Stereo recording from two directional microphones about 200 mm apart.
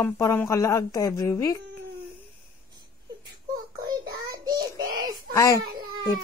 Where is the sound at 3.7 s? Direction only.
20° right (ahead or behind).